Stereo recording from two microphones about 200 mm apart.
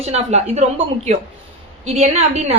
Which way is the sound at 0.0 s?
35° right (ahead or behind).